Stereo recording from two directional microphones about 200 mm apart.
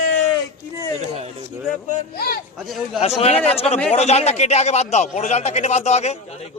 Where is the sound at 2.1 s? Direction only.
50° left (ahead or behind).